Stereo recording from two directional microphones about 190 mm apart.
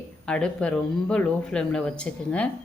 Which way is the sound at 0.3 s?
5° left (ahead or behind).